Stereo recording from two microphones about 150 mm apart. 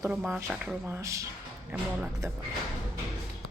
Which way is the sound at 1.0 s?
20° right (ahead or behind).